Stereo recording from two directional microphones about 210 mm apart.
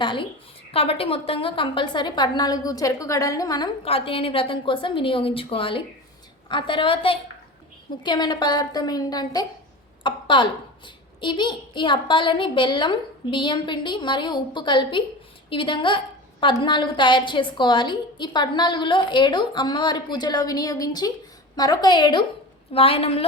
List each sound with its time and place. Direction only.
0.0 s a woman's voice: 25° left (ahead or behind)